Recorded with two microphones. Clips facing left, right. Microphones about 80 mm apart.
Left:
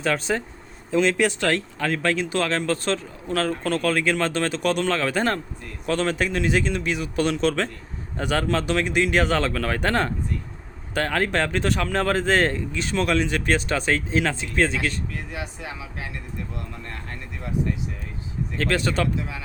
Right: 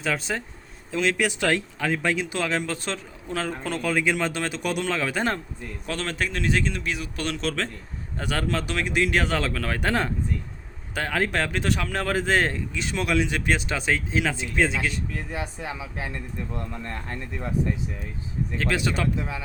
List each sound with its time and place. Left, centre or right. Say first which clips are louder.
0.0 s speech: left 4 dB; centre
5.8 s speech: left 6 dB; centre
15.1 s speech: right 1 dB; right
18.5 s speech: left 3 dB; centre